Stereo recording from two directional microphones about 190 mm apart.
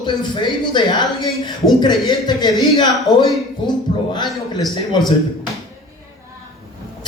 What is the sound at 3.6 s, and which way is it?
Speech, 25° left (ahead or behind).